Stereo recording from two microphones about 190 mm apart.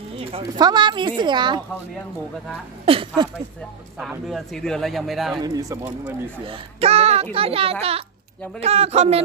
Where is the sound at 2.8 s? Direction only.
30° right (ahead or behind).